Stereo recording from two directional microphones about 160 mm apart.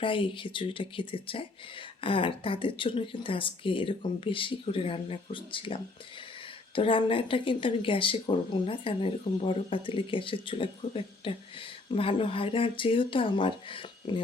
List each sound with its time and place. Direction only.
0.0 s speech: 30° left (ahead or behind)